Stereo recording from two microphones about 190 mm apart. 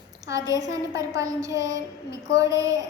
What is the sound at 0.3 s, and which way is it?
A child's voice, 20° right (ahead or behind).